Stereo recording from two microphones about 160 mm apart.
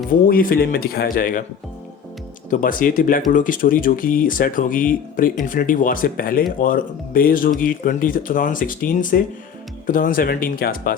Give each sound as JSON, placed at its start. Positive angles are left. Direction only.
{"t": 0.3, "sound": "speech", "side_deg": 65}
{"t": 2.5, "sound": "speech", "side_deg": 55}